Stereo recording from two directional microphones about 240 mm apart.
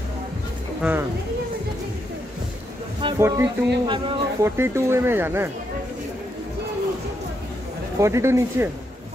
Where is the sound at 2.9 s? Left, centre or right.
Centre.